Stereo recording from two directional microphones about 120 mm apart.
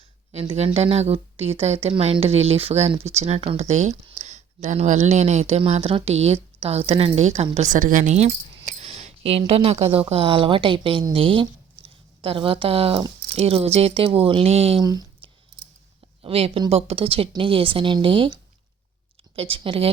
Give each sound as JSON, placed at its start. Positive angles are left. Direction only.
{"t": 0.3, "sound": "a woman's voice", "side_deg": -55}
{"t": 4.2, "sound": "a woman's voice", "side_deg": -80}
{"t": 7.6, "sound": "a woman's voice", "side_deg": -90}
{"t": 14.8, "sound": "speech", "side_deg": -35}
{"t": 15.2, "sound": "clicking", "side_deg": -45}
{"t": 16.2, "sound": "speech", "side_deg": -55}
{"t": 19.4, "sound": "speech", "side_deg": -50}